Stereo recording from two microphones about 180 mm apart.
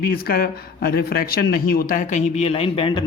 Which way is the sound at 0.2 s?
55° left (ahead or behind).